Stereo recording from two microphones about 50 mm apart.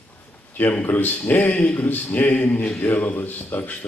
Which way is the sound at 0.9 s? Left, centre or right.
Left.